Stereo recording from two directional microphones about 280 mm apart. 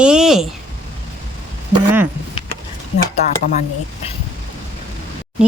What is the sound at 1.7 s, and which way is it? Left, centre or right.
Speech, centre.